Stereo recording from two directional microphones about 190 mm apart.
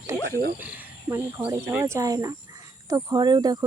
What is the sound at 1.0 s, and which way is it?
Speech, 15° right (ahead or behind).